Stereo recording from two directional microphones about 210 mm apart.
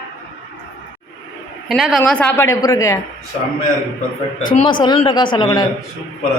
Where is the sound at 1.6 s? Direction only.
Centre (ahead or behind); by 3.0 s 15° left (ahead or behind).